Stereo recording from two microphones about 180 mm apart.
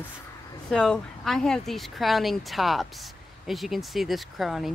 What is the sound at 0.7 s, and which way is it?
Speech, 5° left (ahead or behind).